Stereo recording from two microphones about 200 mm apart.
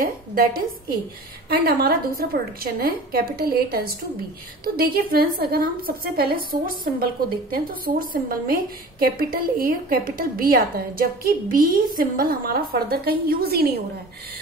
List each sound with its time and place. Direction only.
0.0 s a woman's voice: 45° right (ahead or behind)